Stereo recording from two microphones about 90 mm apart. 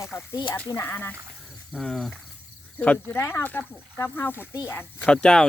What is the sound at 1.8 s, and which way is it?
Speech, 5° left (ahead or behind).